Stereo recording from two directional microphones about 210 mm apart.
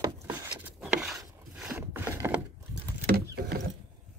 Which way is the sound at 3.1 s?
45° right (ahead or behind).